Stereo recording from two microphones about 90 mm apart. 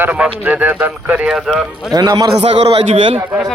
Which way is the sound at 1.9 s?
50° right (ahead or behind).